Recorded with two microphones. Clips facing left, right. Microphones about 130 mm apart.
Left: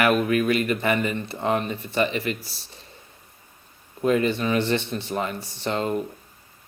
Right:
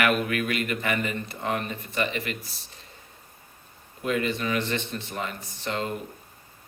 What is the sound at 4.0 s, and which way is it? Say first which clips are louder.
Speech: left 6 dB; 35° left (ahead or behind).